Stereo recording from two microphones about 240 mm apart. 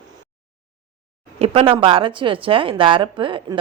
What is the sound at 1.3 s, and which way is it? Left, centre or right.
Speech, right.